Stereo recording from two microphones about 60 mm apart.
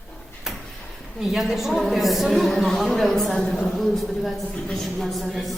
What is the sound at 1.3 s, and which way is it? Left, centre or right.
A man's voice, centre.